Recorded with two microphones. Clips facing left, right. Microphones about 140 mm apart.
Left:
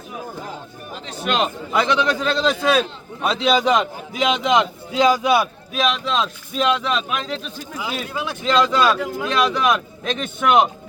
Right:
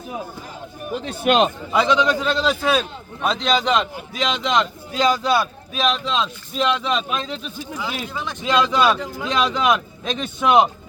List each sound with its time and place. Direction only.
1.0 s a man's voice: 55° right (ahead or behind)
1.7 s a man's voice: 15° right (ahead or behind)
7.8 s speech: 10° left (ahead or behind)
8.4 s speech: 15° right (ahead or behind)
9.0 s a man's voice: 5° left (ahead or behind)
9.3 s speech: 15° right (ahead or behind)